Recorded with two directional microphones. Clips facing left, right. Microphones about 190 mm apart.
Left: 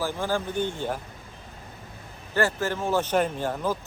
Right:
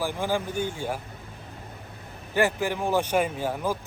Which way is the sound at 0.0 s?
15° right (ahead or behind).